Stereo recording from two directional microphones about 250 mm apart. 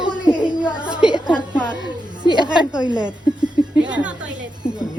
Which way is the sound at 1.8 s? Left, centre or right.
Centre.